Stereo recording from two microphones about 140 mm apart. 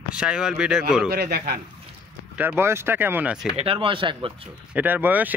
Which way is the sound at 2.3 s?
15° right (ahead or behind).